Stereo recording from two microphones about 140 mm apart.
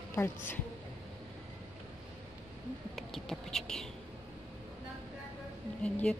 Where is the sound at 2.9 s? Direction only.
Centre (ahead or behind).